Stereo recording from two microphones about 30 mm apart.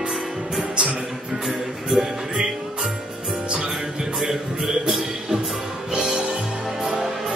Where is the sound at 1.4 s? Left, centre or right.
Right.